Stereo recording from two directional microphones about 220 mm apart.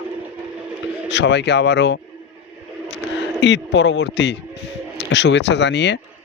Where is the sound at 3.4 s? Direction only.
50° left (ahead or behind).